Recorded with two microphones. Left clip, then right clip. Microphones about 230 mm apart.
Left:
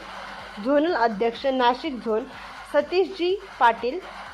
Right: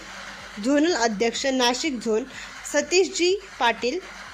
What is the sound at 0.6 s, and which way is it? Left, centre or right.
Speech, right.